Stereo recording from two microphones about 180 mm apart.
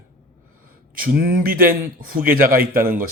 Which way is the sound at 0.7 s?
50° right (ahead or behind).